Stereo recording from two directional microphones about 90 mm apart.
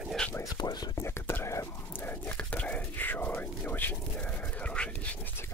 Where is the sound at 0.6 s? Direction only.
50° left (ahead or behind).